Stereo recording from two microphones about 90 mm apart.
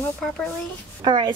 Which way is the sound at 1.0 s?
60° right (ahead or behind).